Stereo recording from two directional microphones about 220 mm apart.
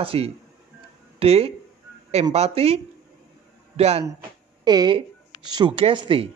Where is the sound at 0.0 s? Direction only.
25° right (ahead or behind).